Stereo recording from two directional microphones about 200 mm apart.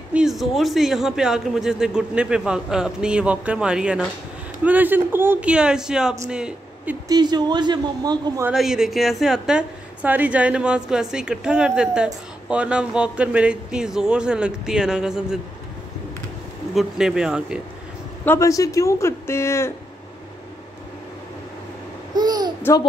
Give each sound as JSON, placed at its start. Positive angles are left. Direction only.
{"t": 0.1, "sound": "a man's voice", "side_deg": 0}
{"t": 7.1, "sound": "a man's voice", "side_deg": -20}
{"t": 8.5, "sound": "a man's voice", "side_deg": 0}
{"t": 16.7, "sound": "a man's voice", "side_deg": -5}
{"t": 18.2, "sound": "speech", "side_deg": 15}
{"t": 22.1, "sound": "babbling", "side_deg": -20}
{"t": 22.6, "sound": "speech", "side_deg": 10}